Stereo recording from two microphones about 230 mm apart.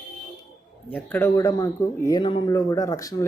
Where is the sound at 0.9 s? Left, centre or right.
Centre.